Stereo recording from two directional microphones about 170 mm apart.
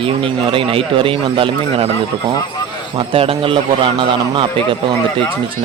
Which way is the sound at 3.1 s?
35° right (ahead or behind).